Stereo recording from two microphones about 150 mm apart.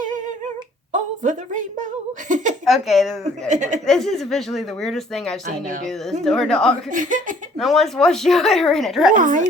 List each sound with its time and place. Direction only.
0.9 s a sound: 55° right (ahead or behind)
2.6 s a woman's voice: centre (ahead or behind)
3.5 s speech: 55° right (ahead or behind)
3.8 s a woman's voice: 5° left (ahead or behind)
5.5 s speech: 60° right (ahead or behind)
5.8 s a woman's voice: centre (ahead or behind)
6.9 s speech: 60° right (ahead or behind)
7.6 s a woman's voice: centre (ahead or behind)
9.1 s speech: 60° right (ahead or behind)